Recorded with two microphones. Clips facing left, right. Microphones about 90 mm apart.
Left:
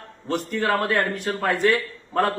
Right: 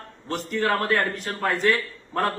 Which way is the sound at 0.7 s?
5° left (ahead or behind).